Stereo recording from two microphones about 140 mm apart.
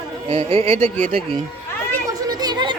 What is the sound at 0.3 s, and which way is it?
Speech, 45° right (ahead or behind).